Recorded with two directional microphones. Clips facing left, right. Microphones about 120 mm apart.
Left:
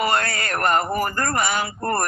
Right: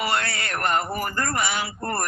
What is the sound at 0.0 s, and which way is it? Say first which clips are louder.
Speech: left 4 dB; 45° left (ahead or behind).